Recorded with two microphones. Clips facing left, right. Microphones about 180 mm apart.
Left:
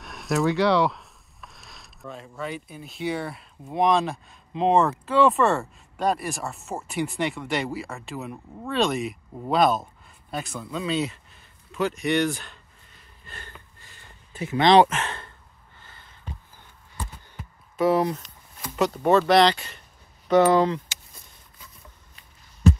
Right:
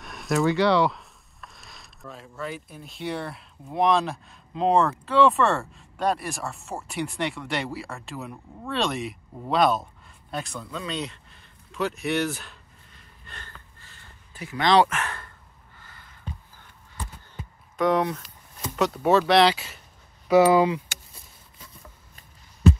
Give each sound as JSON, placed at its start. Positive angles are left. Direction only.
{"t": 0.0, "sound": "speech", "side_deg": 0}
{"t": 13.3, "sound": "a sound", "side_deg": 15}
{"t": 17.7, "sound": "speech", "side_deg": 5}